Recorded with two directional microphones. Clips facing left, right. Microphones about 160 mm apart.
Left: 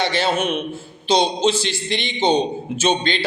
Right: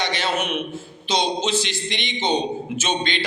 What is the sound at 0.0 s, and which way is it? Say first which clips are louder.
A man's voice: left 4 dB; 30° left (ahead or behind).